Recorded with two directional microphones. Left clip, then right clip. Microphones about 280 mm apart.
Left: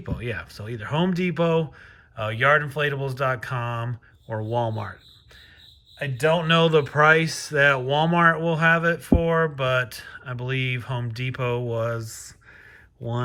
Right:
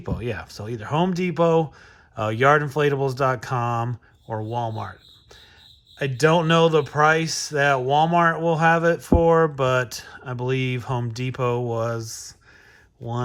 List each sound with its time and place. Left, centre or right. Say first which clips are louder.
0.0 s speech: right 2 dB; centre
6.1 s speech: right 2 dB; centre